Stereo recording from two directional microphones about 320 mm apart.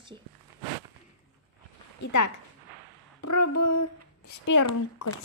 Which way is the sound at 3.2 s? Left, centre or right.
Left.